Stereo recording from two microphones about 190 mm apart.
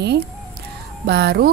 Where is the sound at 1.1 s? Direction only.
60° right (ahead or behind).